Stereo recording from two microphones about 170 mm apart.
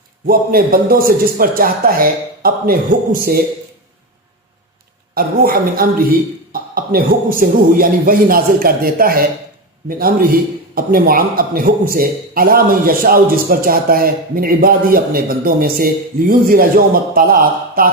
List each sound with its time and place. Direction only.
0.3 s a man's voice: 60° right (ahead or behind)
5.1 s a man's voice: 60° right (ahead or behind)